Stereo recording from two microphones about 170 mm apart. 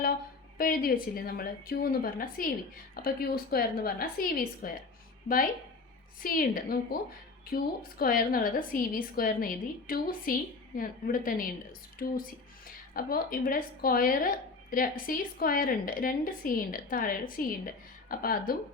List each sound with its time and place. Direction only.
0.6 s speech: 60° left (ahead or behind)
6.2 s speech: 60° left (ahead or behind)